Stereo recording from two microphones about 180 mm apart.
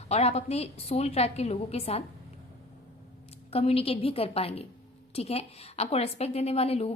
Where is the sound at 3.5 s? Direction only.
35° left (ahead or behind).